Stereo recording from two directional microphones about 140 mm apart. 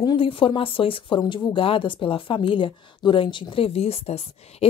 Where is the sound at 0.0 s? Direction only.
35° left (ahead or behind).